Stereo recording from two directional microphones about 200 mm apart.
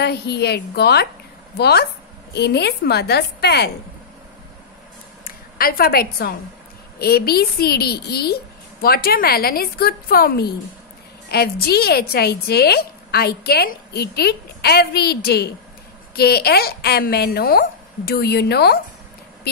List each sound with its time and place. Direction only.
0.0 s a woman's voice: 55° left (ahead or behind)
5.2 s a woman's voice: 45° left (ahead or behind)